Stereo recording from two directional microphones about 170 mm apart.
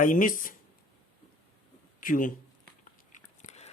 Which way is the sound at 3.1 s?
40° left (ahead or behind).